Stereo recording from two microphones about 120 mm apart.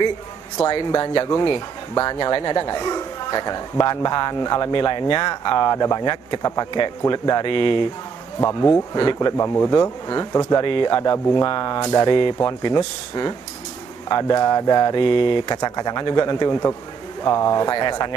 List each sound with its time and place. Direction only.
0.7 s speech: 35° left (ahead or behind)
8.4 s speech: 25° left (ahead or behind)
8.9 s speech: 35° left (ahead or behind)
9.4 s speech: 25° left (ahead or behind)
10.6 s speech: 45° left (ahead or behind)
15.5 s speech: 30° left (ahead or behind)